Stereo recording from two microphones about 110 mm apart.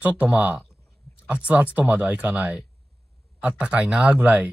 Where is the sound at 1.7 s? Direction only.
15° right (ahead or behind).